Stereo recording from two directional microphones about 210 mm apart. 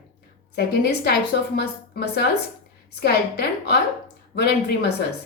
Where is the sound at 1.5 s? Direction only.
50° left (ahead or behind).